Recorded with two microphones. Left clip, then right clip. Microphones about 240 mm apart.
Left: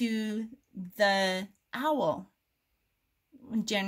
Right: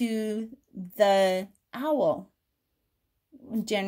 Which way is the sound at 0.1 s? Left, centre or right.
Left.